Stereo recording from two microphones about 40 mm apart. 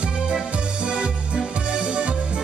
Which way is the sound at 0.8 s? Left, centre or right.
Right.